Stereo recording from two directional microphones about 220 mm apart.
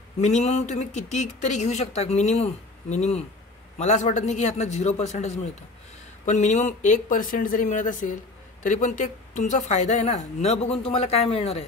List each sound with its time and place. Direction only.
0.2 s speech: 30° left (ahead or behind)